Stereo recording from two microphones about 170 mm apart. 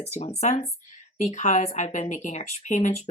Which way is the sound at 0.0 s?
40° left (ahead or behind).